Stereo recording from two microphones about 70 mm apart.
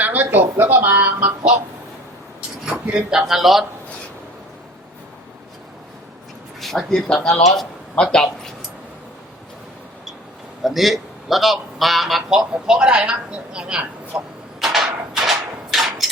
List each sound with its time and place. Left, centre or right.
0.0 s speech: right
2.8 s a man's voice: centre
6.6 s speech: centre
10.6 s a man's voice: centre
14.6 s a sound: centre